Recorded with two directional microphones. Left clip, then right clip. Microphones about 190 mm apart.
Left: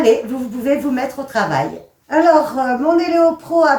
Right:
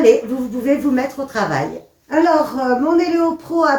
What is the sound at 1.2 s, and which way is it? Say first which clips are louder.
Speech: left 2 dB; 20° left (ahead or behind).